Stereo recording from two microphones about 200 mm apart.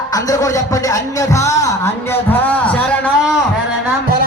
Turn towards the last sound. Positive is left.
turn(degrees=5)  # may be behind; listen again after turning